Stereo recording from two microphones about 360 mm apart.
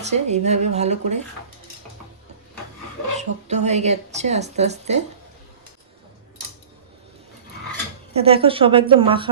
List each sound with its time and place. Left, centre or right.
0.0 s a woman's voice: centre
3.2 s a woman's voice: centre
8.1 s a woman's voice: centre